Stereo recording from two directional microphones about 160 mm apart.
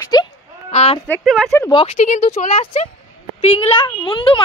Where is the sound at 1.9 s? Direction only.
45° left (ahead or behind).